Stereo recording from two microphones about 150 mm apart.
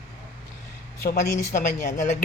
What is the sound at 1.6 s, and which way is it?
Speech, 55° left (ahead or behind).